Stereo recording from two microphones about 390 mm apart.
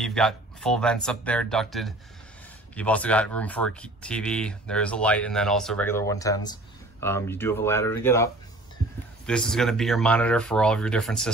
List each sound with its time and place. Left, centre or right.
0.0 s speech: centre